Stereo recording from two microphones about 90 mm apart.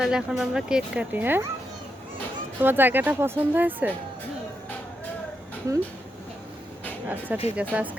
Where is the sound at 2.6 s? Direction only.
20° right (ahead or behind).